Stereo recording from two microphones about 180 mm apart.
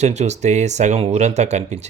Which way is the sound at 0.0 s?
40° right (ahead or behind).